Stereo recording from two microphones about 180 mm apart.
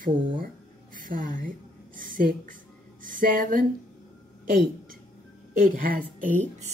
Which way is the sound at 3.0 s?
50° right (ahead or behind).